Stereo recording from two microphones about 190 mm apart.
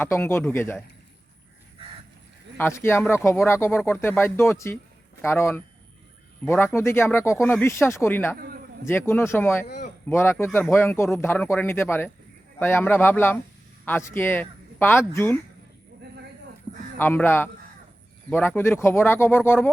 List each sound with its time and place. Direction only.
0.0 s speech: 15° left (ahead or behind)
2.6 s speech: 10° left (ahead or behind)
9.6 s a man's voice: 60° left (ahead or behind)
10.1 s speech: 10° left (ahead or behind)
17.0 s speech: 10° left (ahead or behind)